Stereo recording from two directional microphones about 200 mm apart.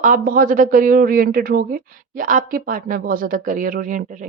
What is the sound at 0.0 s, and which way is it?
Speech, 45° right (ahead or behind).